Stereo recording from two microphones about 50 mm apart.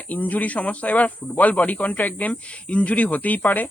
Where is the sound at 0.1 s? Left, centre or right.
Left.